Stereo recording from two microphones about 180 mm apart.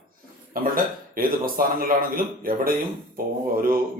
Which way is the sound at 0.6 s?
50° right (ahead or behind).